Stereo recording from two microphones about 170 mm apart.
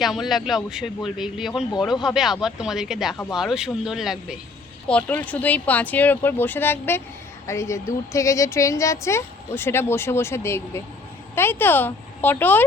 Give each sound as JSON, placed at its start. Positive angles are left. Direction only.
{"t": 0.0, "sound": "a man's voice", "side_deg": 0}
{"t": 4.9, "sound": "a woman's voice", "side_deg": 10}